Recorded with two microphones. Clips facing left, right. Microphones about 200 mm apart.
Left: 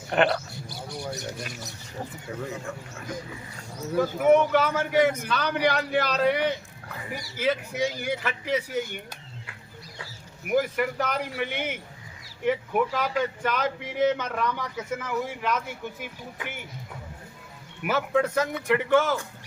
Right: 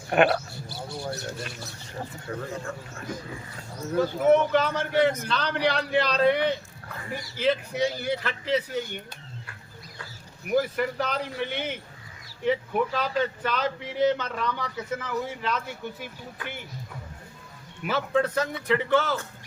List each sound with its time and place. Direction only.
0.7 s speech: 15° left (ahead or behind)
3.9 s speech: 10° left (ahead or behind)
10.5 s speech: 10° left (ahead or behind)
17.8 s speech: 10° left (ahead or behind)